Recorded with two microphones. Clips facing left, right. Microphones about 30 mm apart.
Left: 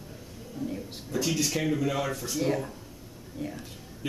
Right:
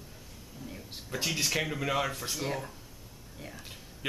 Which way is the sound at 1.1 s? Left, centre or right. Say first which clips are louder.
Left 3 dB; right.